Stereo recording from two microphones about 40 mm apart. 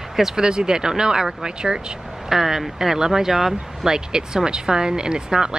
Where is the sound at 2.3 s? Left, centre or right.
Centre.